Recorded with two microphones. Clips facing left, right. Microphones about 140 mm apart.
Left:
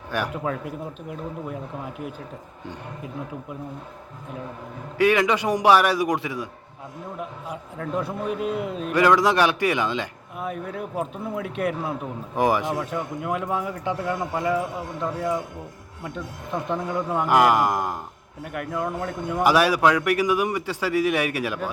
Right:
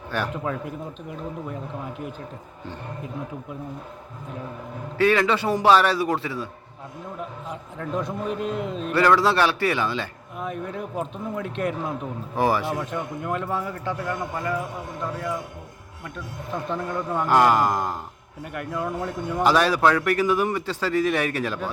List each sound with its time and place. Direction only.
0.4 s speech: centre (ahead or behind)
4.9 s a man's voice: 15° left (ahead or behind)
10.3 s a man's voice: 5° left (ahead or behind)
12.7 s a man's voice: 5° left (ahead or behind); by 14.6 s 20° left (ahead or behind)
16.0 s a man's voice: 20° left (ahead or behind)
18.5 s speech: centre (ahead or behind)
19.4 s a man's voice: 10° left (ahead or behind)